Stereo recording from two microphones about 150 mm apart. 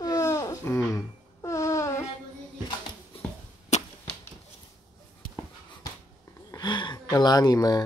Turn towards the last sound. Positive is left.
turn(degrees=25)  # may be behind; listen again after turning